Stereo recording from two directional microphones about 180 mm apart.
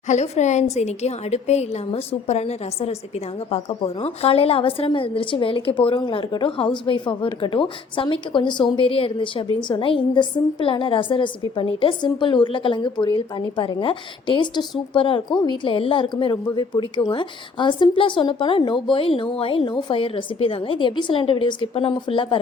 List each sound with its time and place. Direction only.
0.1 s a woman's voice: 40° left (ahead or behind)